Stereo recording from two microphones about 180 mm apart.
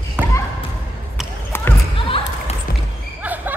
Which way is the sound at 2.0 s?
30° left (ahead or behind).